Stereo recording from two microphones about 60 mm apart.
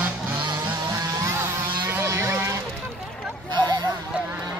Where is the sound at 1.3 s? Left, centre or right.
Right.